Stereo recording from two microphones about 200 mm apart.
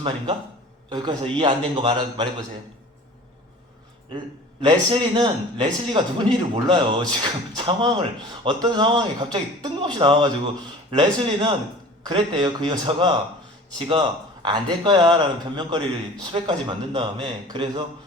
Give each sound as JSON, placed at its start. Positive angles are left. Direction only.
{"t": 0.9, "sound": "speech", "side_deg": -20}
{"t": 4.6, "sound": "speech", "side_deg": -20}